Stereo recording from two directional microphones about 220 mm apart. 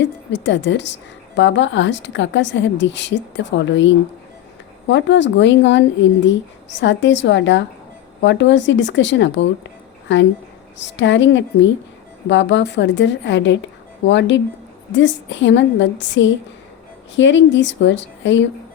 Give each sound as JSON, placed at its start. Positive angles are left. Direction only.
{"t": 0.3, "sound": "a woman's voice", "side_deg": 55}